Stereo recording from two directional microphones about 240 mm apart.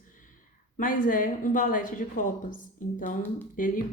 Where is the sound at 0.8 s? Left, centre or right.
Left.